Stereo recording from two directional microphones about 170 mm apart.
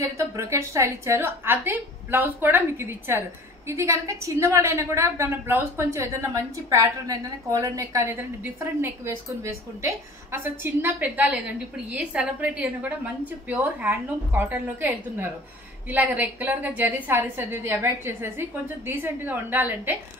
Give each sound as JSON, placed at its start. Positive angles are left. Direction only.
{"t": 0.0, "sound": "a woman's voice", "side_deg": -15}